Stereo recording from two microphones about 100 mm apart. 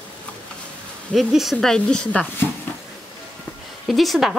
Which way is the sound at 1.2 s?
Centre (ahead or behind).